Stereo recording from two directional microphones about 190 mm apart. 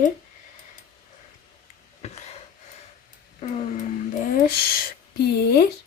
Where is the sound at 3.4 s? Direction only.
35° left (ahead or behind).